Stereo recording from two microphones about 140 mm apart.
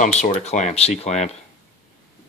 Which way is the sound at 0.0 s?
55° left (ahead or behind).